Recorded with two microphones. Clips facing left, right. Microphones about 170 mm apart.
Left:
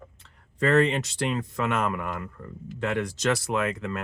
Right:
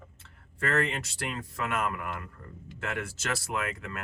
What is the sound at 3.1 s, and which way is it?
Speech, 20° left (ahead or behind).